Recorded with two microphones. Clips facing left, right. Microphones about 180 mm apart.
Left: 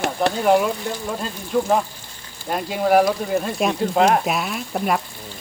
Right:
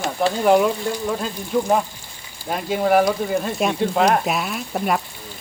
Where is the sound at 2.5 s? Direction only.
Centre (ahead or behind).